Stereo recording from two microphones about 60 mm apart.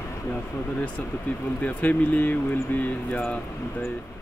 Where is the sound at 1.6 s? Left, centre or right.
Left.